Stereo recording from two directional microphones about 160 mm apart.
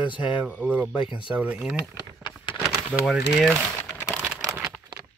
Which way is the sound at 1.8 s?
30° left (ahead or behind).